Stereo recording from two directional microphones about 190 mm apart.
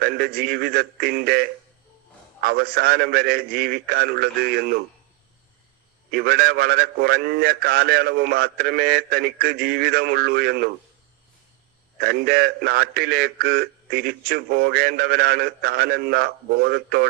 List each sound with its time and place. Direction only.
0.0 s a man's voice: 55° right (ahead or behind)
6.1 s a man's voice: 55° right (ahead or behind)
11.9 s a man's voice: 55° right (ahead or behind)